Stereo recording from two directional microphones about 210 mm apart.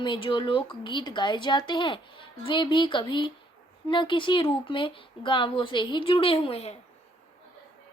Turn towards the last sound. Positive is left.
turn(degrees=30)  # may be behind; listen again after turning